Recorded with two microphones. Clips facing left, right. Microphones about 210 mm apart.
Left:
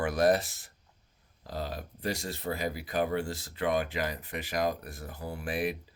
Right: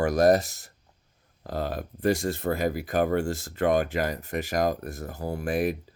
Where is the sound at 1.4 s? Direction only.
55° right (ahead or behind).